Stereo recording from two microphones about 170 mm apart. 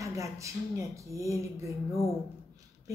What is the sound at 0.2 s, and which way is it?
Speech, 20° right (ahead or behind).